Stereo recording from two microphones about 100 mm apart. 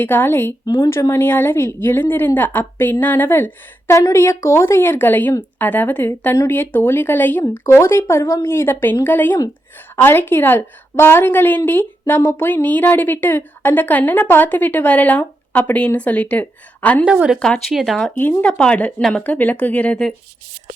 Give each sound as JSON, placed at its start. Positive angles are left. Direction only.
{"t": 0.0, "sound": "a woman's voice", "side_deg": 20}
{"t": 0.6, "sound": "speech", "side_deg": 45}
{"t": 1.1, "sound": "a woman's voice", "side_deg": 20}
{"t": 17.1, "sound": "speech", "side_deg": -10}
{"t": 17.3, "sound": "speech", "side_deg": 5}
{"t": 18.2, "sound": "a woman's voice", "side_deg": 20}